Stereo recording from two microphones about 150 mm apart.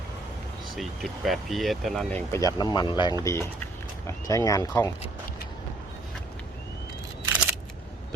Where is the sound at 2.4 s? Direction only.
25° left (ahead or behind).